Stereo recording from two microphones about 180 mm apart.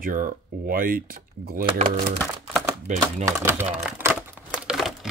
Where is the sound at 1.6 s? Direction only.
35° right (ahead or behind).